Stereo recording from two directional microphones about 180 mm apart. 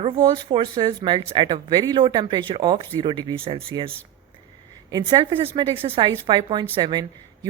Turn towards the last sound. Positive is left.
turn(degrees=-25)  # may be behind; listen again after turning